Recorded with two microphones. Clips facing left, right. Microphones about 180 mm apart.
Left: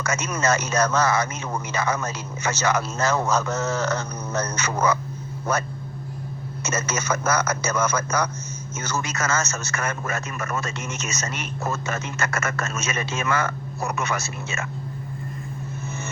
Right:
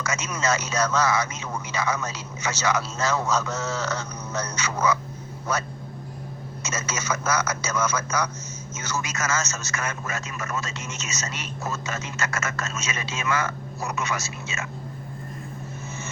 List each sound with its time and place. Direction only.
0.0 s a man's voice: 55° left (ahead or behind)